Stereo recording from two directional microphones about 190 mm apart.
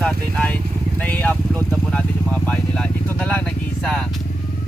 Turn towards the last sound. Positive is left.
turn(degrees=5)  # may be behind; listen again after turning